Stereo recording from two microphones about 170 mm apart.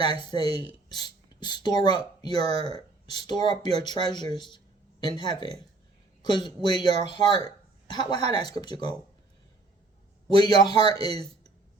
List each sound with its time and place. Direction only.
0.3 s speech: 25° left (ahead or behind)
10.2 s speech: 25° left (ahead or behind)